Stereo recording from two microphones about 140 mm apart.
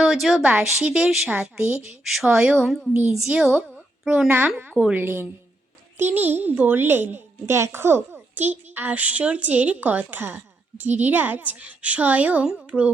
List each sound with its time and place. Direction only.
0.0 s a woman's voice: centre (ahead or behind)